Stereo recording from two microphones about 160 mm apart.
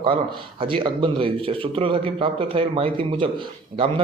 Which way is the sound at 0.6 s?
30° right (ahead or behind).